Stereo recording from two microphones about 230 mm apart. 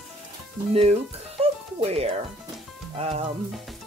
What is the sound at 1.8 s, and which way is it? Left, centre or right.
Speech, right.